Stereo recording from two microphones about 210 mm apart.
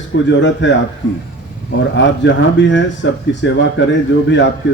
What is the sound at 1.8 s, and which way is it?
Speech, 60° left (ahead or behind).